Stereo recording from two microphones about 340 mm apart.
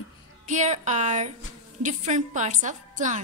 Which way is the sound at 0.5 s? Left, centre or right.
Right.